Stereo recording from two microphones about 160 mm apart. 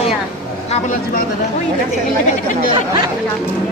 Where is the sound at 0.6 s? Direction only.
45° left (ahead or behind).